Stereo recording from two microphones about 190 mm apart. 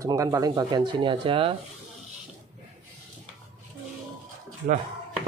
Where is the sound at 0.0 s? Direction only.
15° right (ahead or behind).